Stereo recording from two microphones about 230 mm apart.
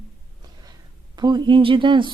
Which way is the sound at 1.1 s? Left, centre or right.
Centre.